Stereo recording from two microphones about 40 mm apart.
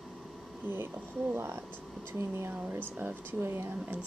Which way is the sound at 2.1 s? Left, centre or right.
Right.